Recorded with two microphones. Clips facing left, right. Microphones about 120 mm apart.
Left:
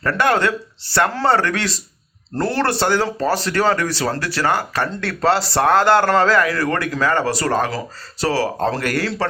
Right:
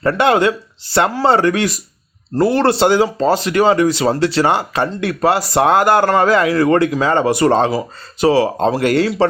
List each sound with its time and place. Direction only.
0.0 s speech: 25° right (ahead or behind)